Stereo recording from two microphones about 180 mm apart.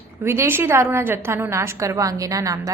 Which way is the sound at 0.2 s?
15° right (ahead or behind).